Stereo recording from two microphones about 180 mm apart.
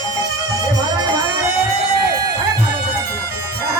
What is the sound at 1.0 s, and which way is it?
Music, 20° right (ahead or behind).